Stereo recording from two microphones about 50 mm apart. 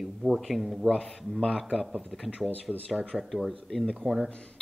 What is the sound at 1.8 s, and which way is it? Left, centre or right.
Speech, centre.